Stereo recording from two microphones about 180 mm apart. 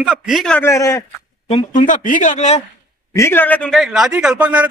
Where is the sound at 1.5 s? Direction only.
35° left (ahead or behind).